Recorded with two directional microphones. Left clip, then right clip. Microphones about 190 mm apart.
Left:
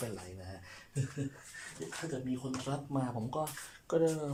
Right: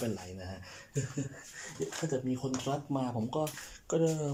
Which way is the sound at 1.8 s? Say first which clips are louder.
Right 7 dB; 25° right (ahead or behind).